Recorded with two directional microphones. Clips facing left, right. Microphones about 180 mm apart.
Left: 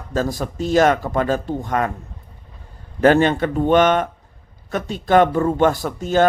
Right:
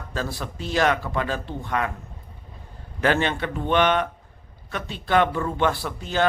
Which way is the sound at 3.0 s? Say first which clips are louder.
Left 8 dB; 45° left (ahead or behind).